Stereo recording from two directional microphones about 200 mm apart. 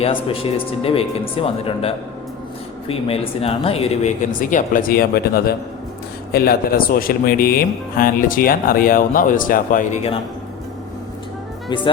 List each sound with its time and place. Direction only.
0.0 s speech: 30° left (ahead or behind)